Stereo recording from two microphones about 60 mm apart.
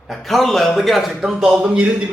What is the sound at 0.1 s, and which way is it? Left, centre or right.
A man's voice, centre.